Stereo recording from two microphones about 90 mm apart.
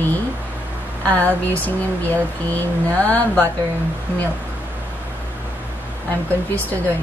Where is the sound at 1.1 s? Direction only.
15° left (ahead or behind).